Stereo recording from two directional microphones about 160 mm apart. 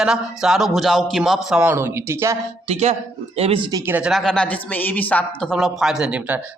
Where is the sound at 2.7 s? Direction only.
40° right (ahead or behind).